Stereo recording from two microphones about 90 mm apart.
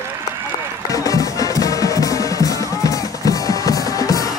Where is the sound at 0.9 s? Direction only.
40° left (ahead or behind).